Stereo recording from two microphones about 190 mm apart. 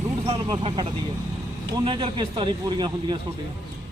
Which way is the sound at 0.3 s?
25° right (ahead or behind).